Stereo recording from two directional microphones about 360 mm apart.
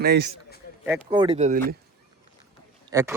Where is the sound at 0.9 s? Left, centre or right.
Centre.